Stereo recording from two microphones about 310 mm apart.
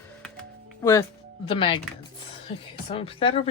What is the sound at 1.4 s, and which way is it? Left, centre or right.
Speech, centre.